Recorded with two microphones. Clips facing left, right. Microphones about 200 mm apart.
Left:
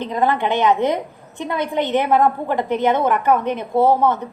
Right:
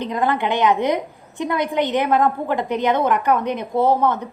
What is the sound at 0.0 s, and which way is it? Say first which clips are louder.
A woman's voice: left 1 dB; 15° right (ahead or behind).